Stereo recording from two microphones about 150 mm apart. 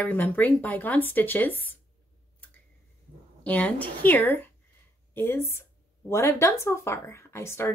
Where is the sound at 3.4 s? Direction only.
10° left (ahead or behind).